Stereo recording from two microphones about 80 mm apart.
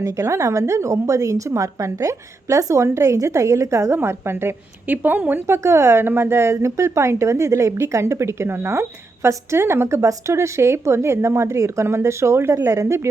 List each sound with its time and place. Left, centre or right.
0.0 s speech: right
5.5 s speech: right